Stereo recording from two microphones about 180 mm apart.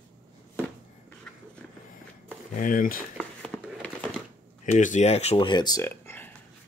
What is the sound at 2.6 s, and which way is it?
Speech, 50° left (ahead or behind).